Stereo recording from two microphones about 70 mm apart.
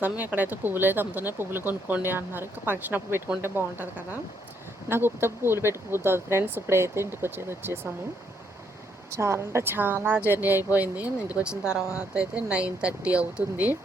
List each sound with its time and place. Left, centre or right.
0.0 s speech: right
9.1 s speech: right
10.8 s speech: right
11.6 s speech: left
12.1 s speech: centre